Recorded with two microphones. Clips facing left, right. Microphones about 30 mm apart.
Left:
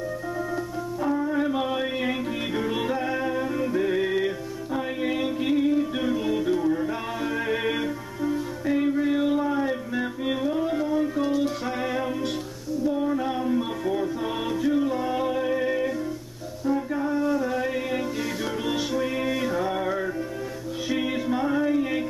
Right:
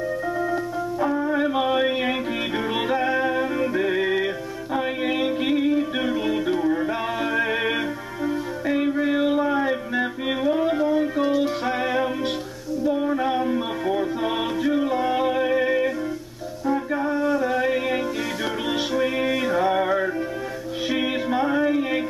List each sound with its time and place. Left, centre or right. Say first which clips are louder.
1.0 s music: right 2 dB; centre
16.7 s a sound: right 2 dB; right
18.7 s music: right 3 dB; right